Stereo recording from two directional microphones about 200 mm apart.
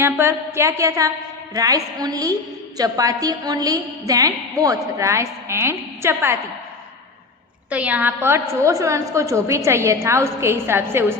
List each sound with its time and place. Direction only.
0.0 s a woman's voice: 10° right (ahead or behind)
7.7 s a woman's voice: 5° right (ahead or behind)